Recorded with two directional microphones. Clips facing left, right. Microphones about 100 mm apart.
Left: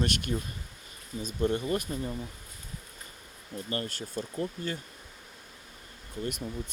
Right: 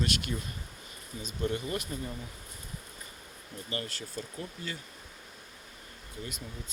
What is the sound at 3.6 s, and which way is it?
Speech, 35° left (ahead or behind).